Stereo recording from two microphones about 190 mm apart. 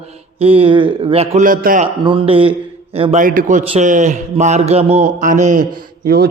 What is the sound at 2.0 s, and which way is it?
A man's voice, 30° right (ahead or behind).